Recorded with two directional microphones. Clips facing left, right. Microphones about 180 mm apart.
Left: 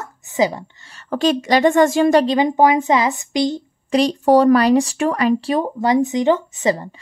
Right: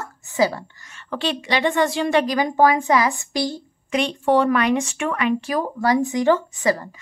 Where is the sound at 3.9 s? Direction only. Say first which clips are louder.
Left 5 dB; 35° left (ahead or behind).